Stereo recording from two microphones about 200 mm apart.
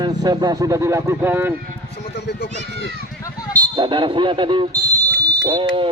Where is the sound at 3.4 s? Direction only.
10° left (ahead or behind).